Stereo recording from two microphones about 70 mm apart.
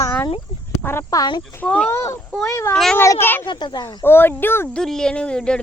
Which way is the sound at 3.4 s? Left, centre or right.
Left.